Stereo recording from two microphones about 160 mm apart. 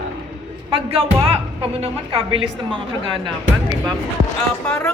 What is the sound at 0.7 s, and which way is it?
A woman's voice, 35° right (ahead or behind).